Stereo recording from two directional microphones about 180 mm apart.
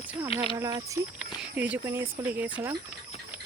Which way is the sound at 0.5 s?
20° right (ahead or behind).